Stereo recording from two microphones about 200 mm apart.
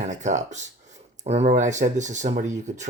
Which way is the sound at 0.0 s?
35° right (ahead or behind).